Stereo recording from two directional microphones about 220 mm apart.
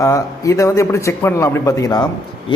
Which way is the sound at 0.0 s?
15° left (ahead or behind).